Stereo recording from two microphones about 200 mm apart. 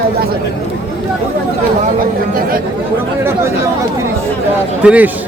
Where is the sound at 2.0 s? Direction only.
45° right (ahead or behind).